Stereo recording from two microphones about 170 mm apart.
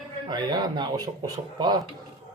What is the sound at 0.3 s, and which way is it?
Speech, 25° right (ahead or behind).